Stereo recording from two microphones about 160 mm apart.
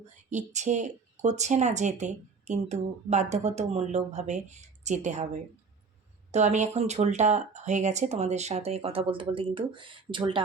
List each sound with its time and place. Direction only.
0.0 s speech: 45° right (ahead or behind)
6.3 s speech: 45° right (ahead or behind)